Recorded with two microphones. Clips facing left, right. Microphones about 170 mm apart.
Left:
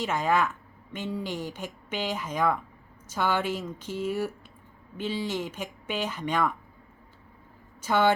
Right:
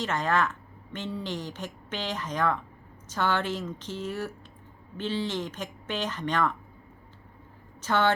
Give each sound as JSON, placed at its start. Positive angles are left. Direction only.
{"t": 0.0, "sound": "a woman's voice", "side_deg": 10}
{"t": 7.8, "sound": "speech", "side_deg": 10}